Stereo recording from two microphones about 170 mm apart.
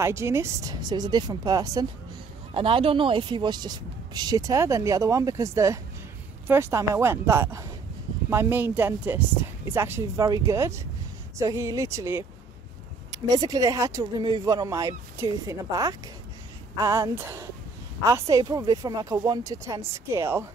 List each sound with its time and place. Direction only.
0.0 s speech: 15° right (ahead or behind)
2.5 s a woman's voice: 30° right (ahead or behind); by 20.4 s 15° right (ahead or behind)